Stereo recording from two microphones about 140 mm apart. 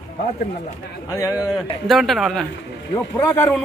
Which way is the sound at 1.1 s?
25° left (ahead or behind).